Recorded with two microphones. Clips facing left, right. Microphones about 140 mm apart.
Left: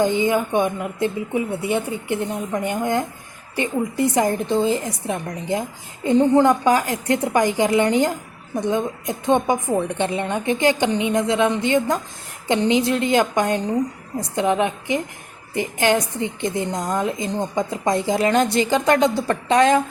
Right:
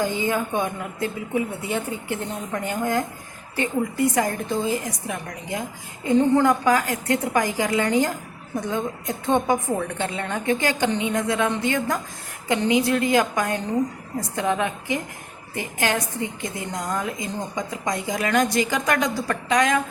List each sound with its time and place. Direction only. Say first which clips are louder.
0.0 s a woman's voice: left 5 dB; 20° left (ahead or behind)